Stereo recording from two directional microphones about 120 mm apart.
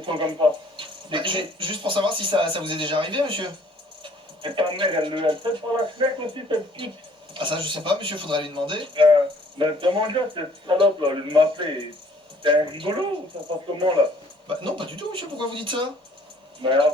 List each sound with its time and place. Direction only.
0.0 s speech: 45° right (ahead or behind)
14.4 s speech: 45° right (ahead or behind)